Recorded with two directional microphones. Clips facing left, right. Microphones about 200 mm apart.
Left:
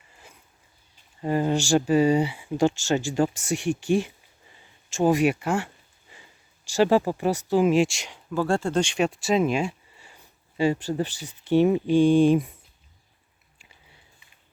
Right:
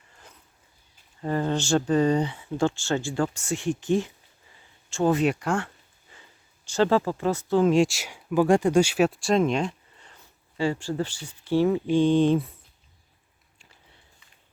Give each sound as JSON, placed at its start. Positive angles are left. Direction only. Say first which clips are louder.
{"t": 1.2, "sound": "speech", "louder": "left 2 dB", "side_deg": 15}